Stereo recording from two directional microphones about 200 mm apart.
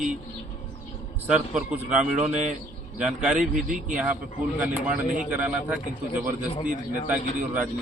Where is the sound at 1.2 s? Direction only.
5° right (ahead or behind).